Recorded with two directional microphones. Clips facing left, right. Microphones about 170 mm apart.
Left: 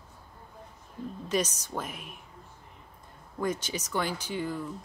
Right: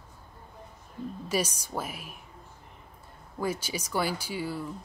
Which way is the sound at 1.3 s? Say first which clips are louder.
Left 1 dB; 10° right (ahead or behind).